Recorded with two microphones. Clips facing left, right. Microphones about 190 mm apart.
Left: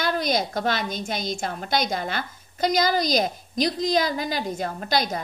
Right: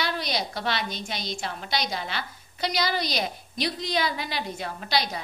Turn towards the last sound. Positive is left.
turn(degrees=45)  # may be behind; listen again after turning